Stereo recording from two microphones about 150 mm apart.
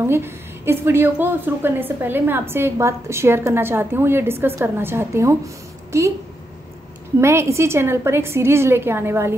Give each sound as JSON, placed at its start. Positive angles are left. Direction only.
{"t": 0.0, "sound": "a woman's voice", "side_deg": -15}
{"t": 7.2, "sound": "a woman's voice", "side_deg": -15}